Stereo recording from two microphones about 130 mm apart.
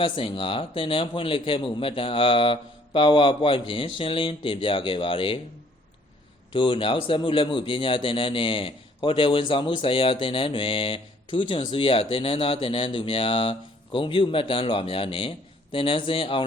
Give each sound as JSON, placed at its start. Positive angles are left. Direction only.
{"t": 0.0, "sound": "speech", "side_deg": 40}
{"t": 6.5, "sound": "speech", "side_deg": 40}